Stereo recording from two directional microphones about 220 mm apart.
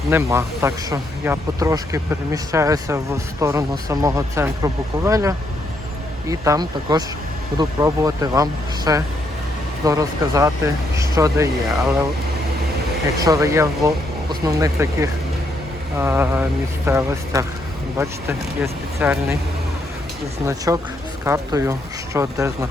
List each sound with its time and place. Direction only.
0.1 s speech: 10° right (ahead or behind)
13.1 s speech: 15° right (ahead or behind)
20.7 s speech: 10° right (ahead or behind)